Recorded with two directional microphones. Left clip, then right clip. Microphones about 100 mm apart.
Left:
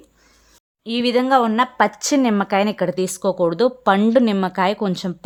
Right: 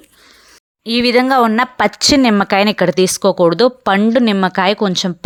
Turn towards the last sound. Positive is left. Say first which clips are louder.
# right 6 dB
turn(degrees=-30)  # may be behind; listen again after turning